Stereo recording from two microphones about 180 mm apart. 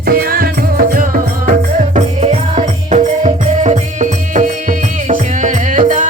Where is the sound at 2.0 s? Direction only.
35° right (ahead or behind).